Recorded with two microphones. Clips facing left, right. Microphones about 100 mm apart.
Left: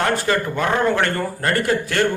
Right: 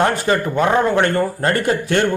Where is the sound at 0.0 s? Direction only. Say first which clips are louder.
Right 3 dB; 20° right (ahead or behind).